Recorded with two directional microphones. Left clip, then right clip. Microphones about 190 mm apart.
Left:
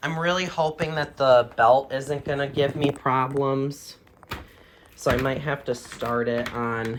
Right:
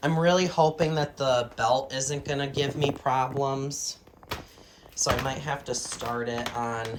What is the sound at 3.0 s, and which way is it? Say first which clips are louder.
Speech: left 2 dB; 15° right (ahead or behind).